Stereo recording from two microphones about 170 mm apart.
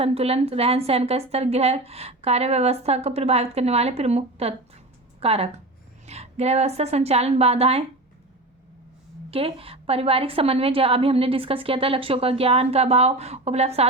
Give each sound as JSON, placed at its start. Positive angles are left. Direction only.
{"t": 0.0, "sound": "a woman's voice", "side_deg": -35}
{"t": 9.3, "sound": "a woman's voice", "side_deg": -35}